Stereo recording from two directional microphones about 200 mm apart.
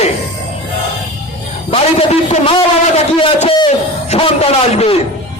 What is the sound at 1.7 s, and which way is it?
A man's voice, 30° left (ahead or behind).